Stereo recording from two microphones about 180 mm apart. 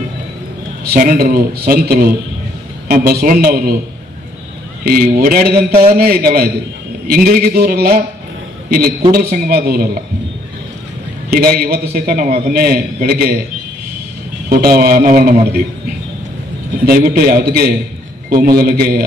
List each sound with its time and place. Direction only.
0.8 s a man's voice: 55° right (ahead or behind)
4.8 s a man's voice: 55° right (ahead or behind)
11.2 s a man's voice: 55° right (ahead or behind)
14.5 s a man's voice: 55° right (ahead or behind)
16.8 s a man's voice: 55° right (ahead or behind)